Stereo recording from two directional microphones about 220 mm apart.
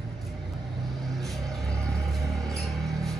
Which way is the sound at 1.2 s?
Centre (ahead or behind).